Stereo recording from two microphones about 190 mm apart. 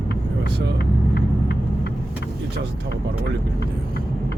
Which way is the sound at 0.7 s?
60° left (ahead or behind).